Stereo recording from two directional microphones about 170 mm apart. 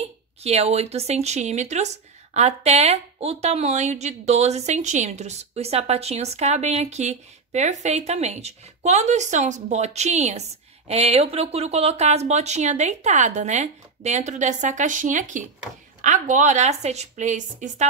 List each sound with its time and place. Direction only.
0.0 s speech: 40° right (ahead or behind)